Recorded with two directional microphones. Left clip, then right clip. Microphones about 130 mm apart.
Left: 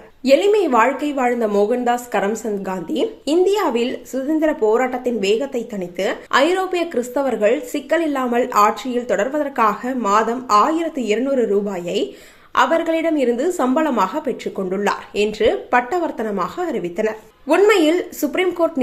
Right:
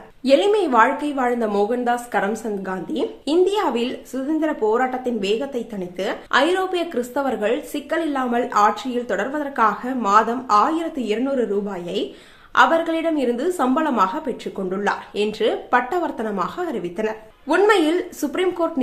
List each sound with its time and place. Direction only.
0.3 s a woman's voice: 15° left (ahead or behind)